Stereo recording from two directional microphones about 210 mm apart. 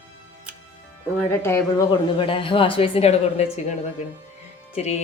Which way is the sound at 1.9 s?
25° left (ahead or behind).